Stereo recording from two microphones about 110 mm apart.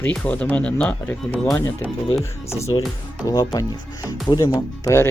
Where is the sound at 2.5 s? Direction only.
25° left (ahead or behind).